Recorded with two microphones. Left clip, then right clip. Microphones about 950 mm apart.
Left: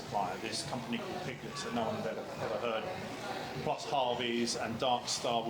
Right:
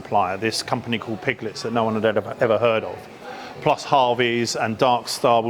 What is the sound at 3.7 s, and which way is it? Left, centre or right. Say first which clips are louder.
Speech: right 15 dB; right.